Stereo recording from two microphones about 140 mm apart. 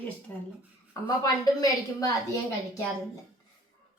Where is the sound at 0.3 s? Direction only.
10° left (ahead or behind).